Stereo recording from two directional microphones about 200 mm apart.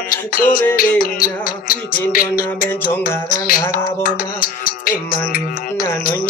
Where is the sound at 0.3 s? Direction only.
45° left (ahead or behind).